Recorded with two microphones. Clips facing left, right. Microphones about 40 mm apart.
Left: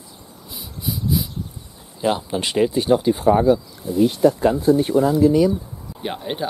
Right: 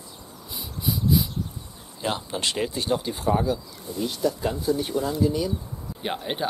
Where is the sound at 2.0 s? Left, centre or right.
Centre.